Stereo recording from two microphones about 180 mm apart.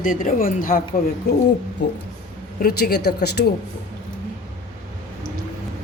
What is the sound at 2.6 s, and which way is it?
Speech, 55° left (ahead or behind).